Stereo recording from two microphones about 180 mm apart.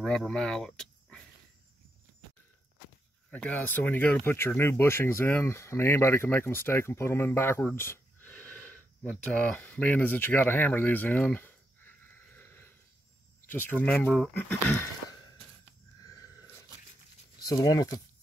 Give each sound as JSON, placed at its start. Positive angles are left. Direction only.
{"t": 0.0, "sound": "speech", "side_deg": 5}
{"t": 3.3, "sound": "speech", "side_deg": 5}
{"t": 16.0, "sound": "a sound", "side_deg": 20}
{"t": 17.4, "sound": "speech", "side_deg": 20}